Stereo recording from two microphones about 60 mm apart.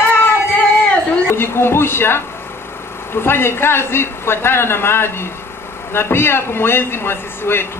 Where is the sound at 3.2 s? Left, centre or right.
Left.